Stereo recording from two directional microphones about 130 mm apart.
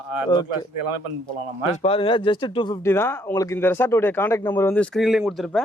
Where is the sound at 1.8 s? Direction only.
45° left (ahead or behind).